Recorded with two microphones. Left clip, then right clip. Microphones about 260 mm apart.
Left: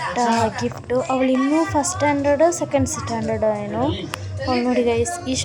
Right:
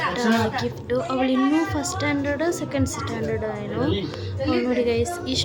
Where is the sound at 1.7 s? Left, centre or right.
Centre.